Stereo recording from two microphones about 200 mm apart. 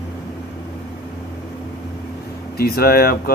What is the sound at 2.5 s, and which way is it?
Speech, 50° left (ahead or behind).